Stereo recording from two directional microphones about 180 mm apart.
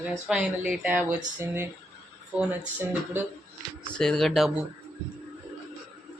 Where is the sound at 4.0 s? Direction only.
Centre (ahead or behind).